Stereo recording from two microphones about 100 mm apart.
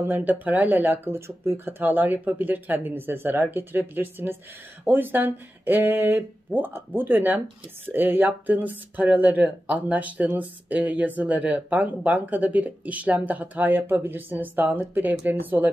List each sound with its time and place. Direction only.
0.0 s speech: 20° right (ahead or behind)